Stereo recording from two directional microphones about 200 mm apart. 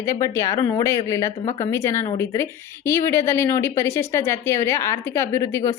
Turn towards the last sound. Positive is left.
turn(degrees=15)  # may be behind; listen again after turning